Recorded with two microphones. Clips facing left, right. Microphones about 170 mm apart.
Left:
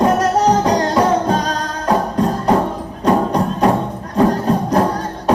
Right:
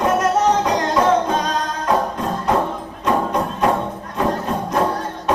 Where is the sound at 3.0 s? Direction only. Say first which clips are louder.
Left 4 dB; 35° left (ahead or behind).